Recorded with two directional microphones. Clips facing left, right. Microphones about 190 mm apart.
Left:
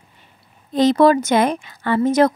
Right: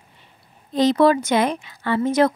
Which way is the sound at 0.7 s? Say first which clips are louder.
Left 2 dB; 50° left (ahead or behind).